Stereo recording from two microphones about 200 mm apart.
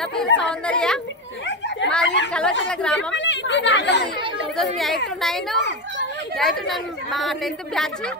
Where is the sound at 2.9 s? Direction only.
65° left (ahead or behind).